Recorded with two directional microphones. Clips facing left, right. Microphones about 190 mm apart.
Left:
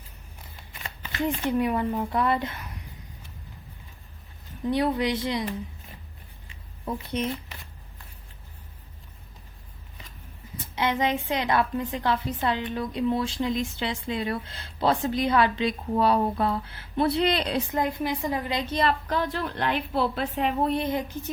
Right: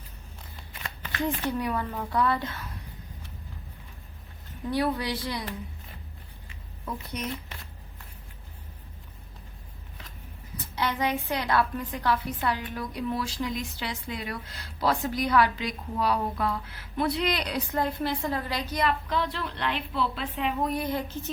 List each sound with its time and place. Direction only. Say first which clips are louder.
1.2 s a woman's voice: left 4 dB; 20° left (ahead or behind)
4.6 s a woman's voice: left 3 dB; 20° left (ahead or behind)
6.5 s a sound: left 4 dB; 30° left (ahead or behind)
10.8 s a woman's voice: left 3 dB; 20° left (ahead or behind)
19.0 s a woman's voice: left 2 dB; 45° left (ahead or behind)
20.7 s speech: left 3 dB; 25° left (ahead or behind)